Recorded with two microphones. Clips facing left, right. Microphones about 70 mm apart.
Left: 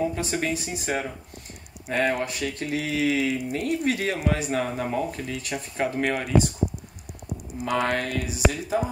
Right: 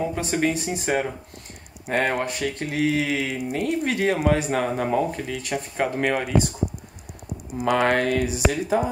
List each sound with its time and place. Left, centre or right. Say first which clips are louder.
0.1 s speech: right 4 dB; right
4.8 s speech: right 4 dB; right
7.6 s speech: right 5 dB; right